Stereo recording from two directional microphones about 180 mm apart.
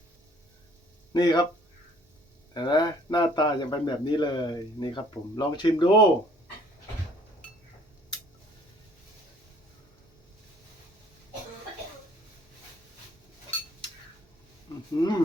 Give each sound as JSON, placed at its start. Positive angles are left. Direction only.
{"t": 1.1, "sound": "speech", "side_deg": 20}
{"t": 2.5, "sound": "speech", "side_deg": 25}
{"t": 15.0, "sound": "a sound", "side_deg": 20}